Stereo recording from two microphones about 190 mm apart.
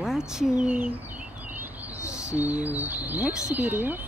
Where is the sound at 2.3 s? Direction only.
10° right (ahead or behind).